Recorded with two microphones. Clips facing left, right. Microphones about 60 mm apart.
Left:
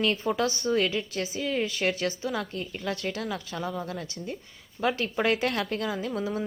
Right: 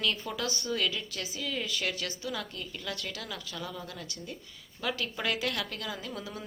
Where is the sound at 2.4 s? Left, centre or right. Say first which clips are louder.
Left 6 dB; left.